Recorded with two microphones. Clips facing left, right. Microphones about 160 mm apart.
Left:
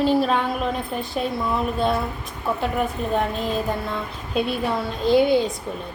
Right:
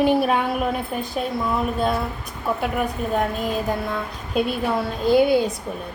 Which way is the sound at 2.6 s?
5° right (ahead or behind).